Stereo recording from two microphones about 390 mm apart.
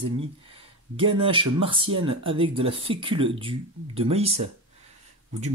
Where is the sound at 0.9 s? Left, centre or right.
Centre.